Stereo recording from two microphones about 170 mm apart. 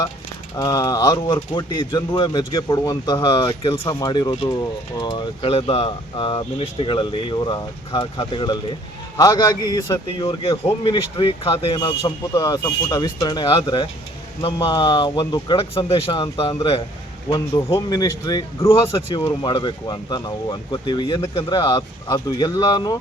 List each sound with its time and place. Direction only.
0.5 s speech: 20° left (ahead or behind)